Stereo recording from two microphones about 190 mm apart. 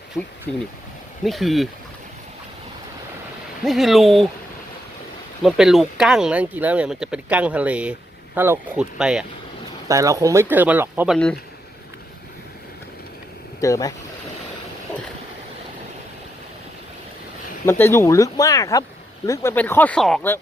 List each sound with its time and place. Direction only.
0.1 s speech: 15° left (ahead or behind)
1.2 s speech: centre (ahead or behind)
3.6 s speech: centre (ahead or behind)
5.4 s speech: centre (ahead or behind)
9.9 s speech: 15° right (ahead or behind)
13.6 s speech: 15° left (ahead or behind)
17.7 s speech: 15° left (ahead or behind)